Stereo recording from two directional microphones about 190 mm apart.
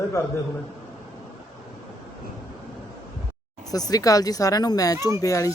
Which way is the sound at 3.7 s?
20° left (ahead or behind).